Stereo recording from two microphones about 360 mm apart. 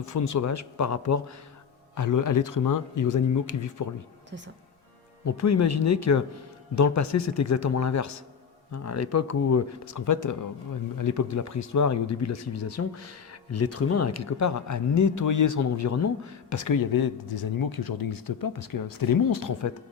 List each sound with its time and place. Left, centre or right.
0.0 s speech: left
5.2 s speech: left